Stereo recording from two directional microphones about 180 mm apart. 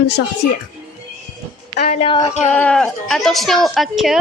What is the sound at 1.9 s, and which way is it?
Speech, 30° left (ahead or behind).